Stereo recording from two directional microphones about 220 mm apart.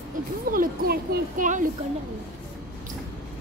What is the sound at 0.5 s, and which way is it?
Speech, 40° right (ahead or behind).